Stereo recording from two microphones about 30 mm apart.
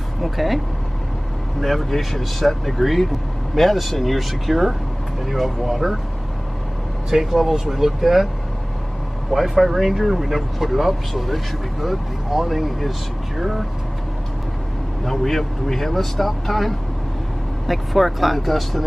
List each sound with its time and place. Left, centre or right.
0.2 s speech: centre
1.6 s speech: centre
7.1 s speech: centre
9.3 s speech: centre
15.0 s speech: centre